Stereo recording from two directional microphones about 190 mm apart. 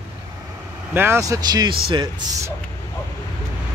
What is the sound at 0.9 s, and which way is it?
Speech, 10° right (ahead or behind).